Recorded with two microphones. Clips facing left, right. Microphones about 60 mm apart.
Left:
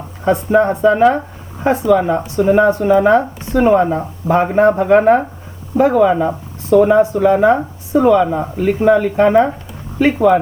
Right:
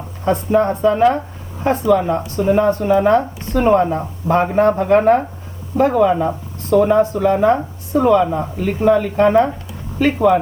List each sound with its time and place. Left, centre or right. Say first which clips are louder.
0.3 s speech: left 2 dB; centre
7.5 s speech: left 3 dB; centre